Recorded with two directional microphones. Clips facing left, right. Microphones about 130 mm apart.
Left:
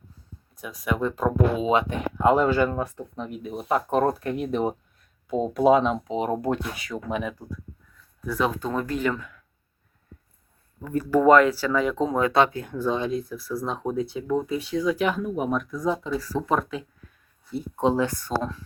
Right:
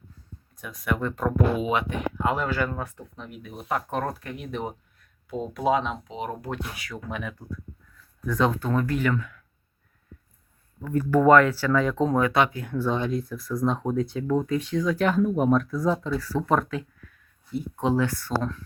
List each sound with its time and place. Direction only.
0.6 s speech: 15° left (ahead or behind); by 6.6 s 40° left (ahead or behind)
6.8 s speech: 20° left (ahead or behind)
10.8 s speech: 15° left (ahead or behind)
13.3 s speech: 5° left (ahead or behind)
17.5 s speech: 30° left (ahead or behind)